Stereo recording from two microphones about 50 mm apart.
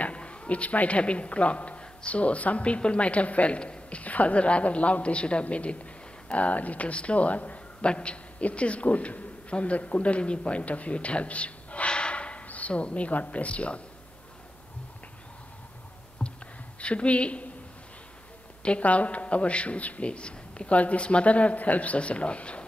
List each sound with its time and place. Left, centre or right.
0.0 s a man's voice: left
16.2 s a sound: centre
16.8 s a man's voice: left
18.6 s a man's voice: left